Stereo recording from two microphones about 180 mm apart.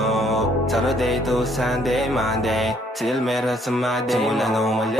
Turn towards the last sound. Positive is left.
turn(degrees=0)  # may be behind; listen again after turning